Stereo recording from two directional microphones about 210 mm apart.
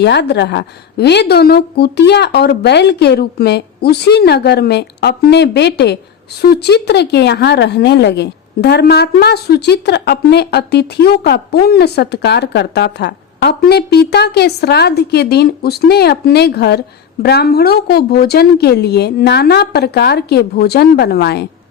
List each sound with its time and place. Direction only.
0.0 s a woman's voice: 55° left (ahead or behind)